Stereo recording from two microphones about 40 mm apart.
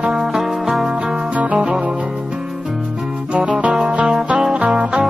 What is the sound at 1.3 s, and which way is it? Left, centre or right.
Music, right.